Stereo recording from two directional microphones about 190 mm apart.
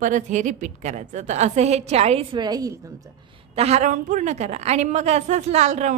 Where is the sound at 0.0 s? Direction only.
40° right (ahead or behind); by 2.7 s 20° right (ahead or behind).